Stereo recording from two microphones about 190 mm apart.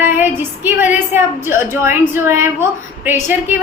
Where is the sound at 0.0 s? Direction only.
10° right (ahead or behind).